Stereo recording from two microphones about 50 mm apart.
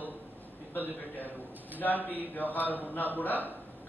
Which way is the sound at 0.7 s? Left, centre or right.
Left.